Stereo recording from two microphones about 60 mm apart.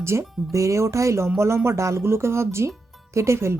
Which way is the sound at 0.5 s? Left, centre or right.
Right.